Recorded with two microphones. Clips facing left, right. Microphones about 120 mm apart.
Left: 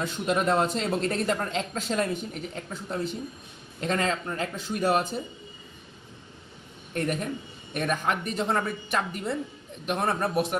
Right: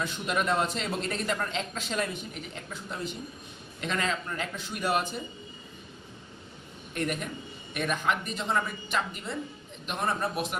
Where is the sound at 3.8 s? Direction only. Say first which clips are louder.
Left 4 dB; 40° left (ahead or behind).